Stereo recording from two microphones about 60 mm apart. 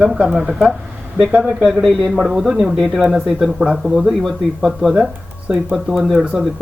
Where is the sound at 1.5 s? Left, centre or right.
Centre.